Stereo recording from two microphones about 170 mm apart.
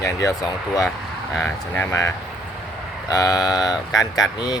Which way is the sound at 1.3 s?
10° left (ahead or behind).